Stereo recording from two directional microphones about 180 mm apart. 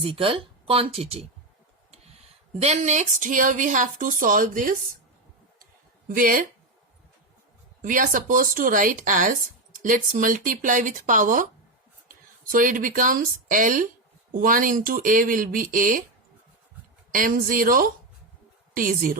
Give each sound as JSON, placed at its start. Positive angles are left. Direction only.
{"t": 0.0, "sound": "speech", "side_deg": -30}
{"t": 2.6, "sound": "speech", "side_deg": -40}
{"t": 6.1, "sound": "speech", "side_deg": -50}
{"t": 7.8, "sound": "speech", "side_deg": -50}
{"t": 17.1, "sound": "a woman's voice", "side_deg": -50}